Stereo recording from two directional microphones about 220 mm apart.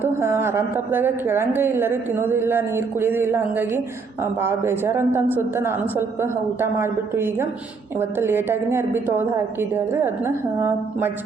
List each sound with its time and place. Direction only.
0.0 s a woman's voice: 10° right (ahead or behind)